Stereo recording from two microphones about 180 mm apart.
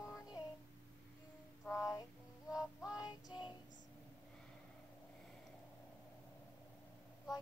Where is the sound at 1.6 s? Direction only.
15° left (ahead or behind).